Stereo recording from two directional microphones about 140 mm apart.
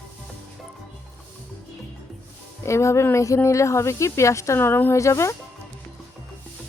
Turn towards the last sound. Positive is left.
turn(degrees=20)  # may be behind; listen again after turning